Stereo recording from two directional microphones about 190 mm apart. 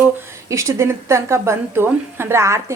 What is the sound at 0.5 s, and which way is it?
A woman's voice, 15° right (ahead or behind).